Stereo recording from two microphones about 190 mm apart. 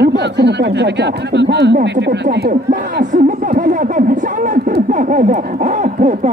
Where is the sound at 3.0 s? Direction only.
45° right (ahead or behind).